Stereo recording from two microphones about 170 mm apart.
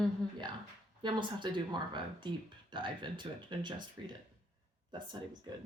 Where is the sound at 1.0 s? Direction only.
25° right (ahead or behind).